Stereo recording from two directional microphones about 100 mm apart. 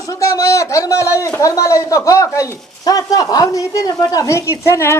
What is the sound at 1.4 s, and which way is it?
Speech, 30° left (ahead or behind).